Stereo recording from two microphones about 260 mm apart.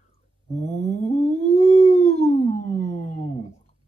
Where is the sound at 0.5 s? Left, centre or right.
Left.